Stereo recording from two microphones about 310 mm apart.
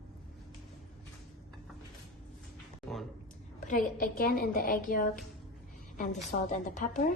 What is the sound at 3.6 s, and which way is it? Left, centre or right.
A woman's voice, left.